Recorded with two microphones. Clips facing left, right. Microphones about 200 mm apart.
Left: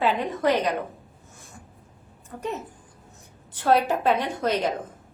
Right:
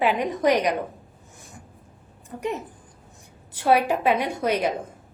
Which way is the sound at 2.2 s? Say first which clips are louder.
Right 3 dB; 15° right (ahead or behind).